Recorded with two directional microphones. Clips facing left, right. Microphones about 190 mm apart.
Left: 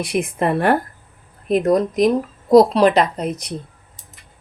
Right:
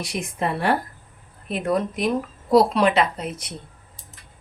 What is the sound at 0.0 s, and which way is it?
Speech, 55° left (ahead or behind).